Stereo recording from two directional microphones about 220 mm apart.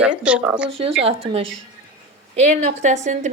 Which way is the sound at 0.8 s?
25° right (ahead or behind).